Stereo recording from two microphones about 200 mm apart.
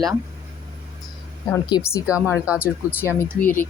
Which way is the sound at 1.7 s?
15° left (ahead or behind).